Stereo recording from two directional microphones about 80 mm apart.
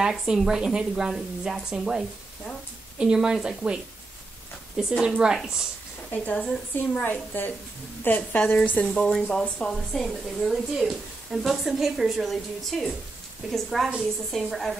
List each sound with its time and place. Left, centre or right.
0.0 s a woman's voice: centre
6.3 s a woman's voice: centre
7.1 s a woman's voice: left
8.8 s a woman's voice: centre